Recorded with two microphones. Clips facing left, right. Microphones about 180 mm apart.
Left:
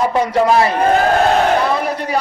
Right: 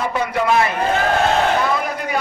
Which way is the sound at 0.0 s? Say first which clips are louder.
Left 6 dB; 35° left (ahead or behind).